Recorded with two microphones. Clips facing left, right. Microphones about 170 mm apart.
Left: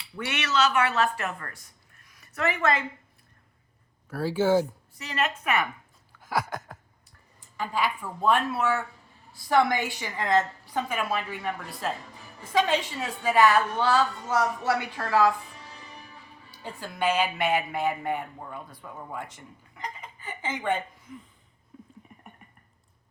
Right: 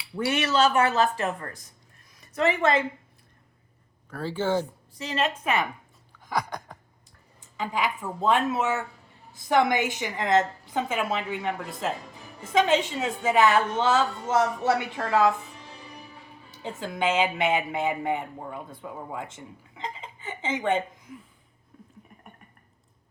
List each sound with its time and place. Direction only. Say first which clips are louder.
0.2 s a woman's voice: right 4 dB; 35° right (ahead or behind)
4.1 s speech: left 3 dB; 10° left (ahead or behind)
4.9 s a woman's voice: right 2 dB; 30° right (ahead or behind)
6.1 s a sound: even; 5° left (ahead or behind)
7.5 s a woman's voice: even; 20° right (ahead or behind)
16.5 s a woman's voice: right 5 dB; 20° right (ahead or behind)
21.7 s a sound: left 3 dB; centre (ahead or behind)